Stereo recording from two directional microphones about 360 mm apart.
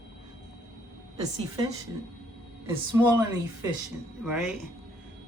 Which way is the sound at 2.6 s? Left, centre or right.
Centre.